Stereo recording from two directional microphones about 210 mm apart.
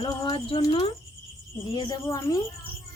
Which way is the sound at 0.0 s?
25° left (ahead or behind).